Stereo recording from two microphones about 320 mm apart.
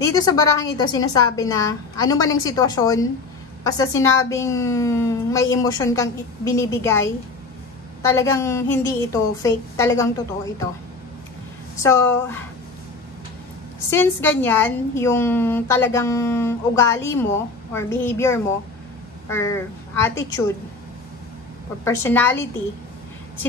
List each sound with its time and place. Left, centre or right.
0.0 s a woman's voice: centre
8.0 s a woman's voice: centre
11.8 s a woman's voice: centre
13.8 s a woman's voice: centre
21.8 s a woman's voice: centre